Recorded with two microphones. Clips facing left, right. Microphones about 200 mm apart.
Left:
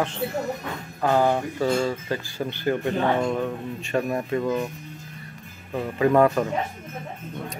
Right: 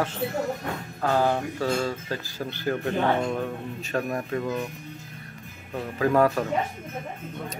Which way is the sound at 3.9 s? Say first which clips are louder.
Left 3 dB; 5° left (ahead or behind).